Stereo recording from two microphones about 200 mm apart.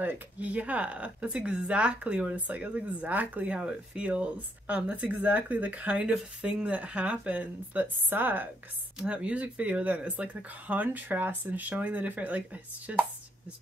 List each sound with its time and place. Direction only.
0.0 s speech: 10° right (ahead or behind)